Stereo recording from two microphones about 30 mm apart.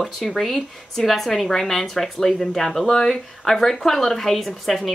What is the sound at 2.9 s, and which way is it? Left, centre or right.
Speech, centre.